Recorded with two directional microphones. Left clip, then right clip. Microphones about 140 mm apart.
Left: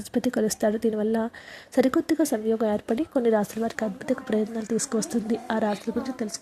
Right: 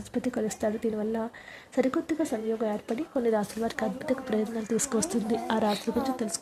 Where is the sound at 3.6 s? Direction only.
15° left (ahead or behind).